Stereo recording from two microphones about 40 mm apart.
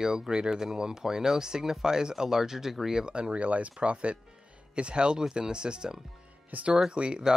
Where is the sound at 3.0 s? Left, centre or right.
Right.